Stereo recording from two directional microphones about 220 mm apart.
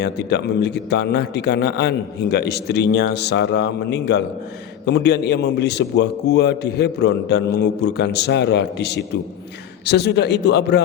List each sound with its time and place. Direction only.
0.0 s a man's voice: 50° left (ahead or behind)